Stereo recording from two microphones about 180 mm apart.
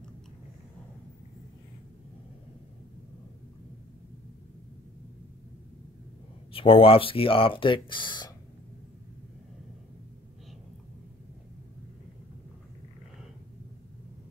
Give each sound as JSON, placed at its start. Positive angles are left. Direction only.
{"t": 6.5, "sound": "speech", "side_deg": 30}